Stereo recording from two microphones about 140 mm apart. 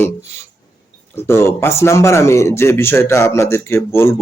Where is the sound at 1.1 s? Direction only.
20° left (ahead or behind).